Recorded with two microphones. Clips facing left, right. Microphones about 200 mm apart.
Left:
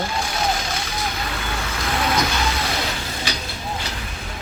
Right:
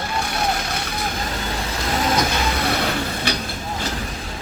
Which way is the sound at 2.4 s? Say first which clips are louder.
Right 3 dB; 60° right (ahead or behind).